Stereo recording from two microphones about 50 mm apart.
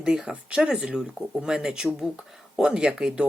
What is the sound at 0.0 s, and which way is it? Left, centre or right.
Speech, centre.